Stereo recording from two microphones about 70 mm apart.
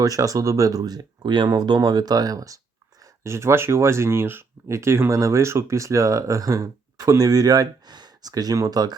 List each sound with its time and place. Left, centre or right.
0.0 s speech: right
3.2 s speech: right